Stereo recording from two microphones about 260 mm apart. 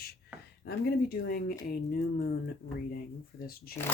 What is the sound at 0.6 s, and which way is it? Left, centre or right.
Speech, left.